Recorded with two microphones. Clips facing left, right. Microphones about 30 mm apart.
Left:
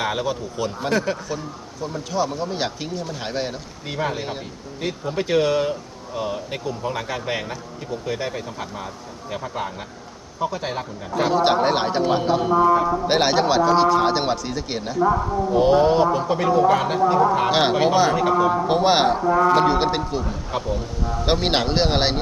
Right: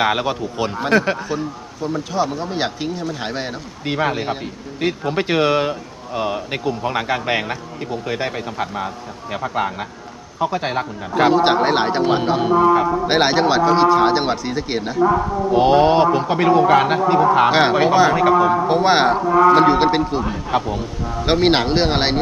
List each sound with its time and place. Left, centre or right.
0.0 s a man's voice: right; by 3.5 s centre
3.8 s a man's voice: right
11.3 s a man's voice: centre; by 12.9 s right
12.9 s speech: centre
15.4 s speech: right
17.5 s speech: centre
18.2 s speech: right
18.8 s speech: centre
20.5 s speech: right
21.0 s speech: centre